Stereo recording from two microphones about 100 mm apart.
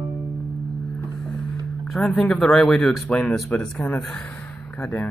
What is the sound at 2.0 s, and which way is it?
Speech, 5° left (ahead or behind).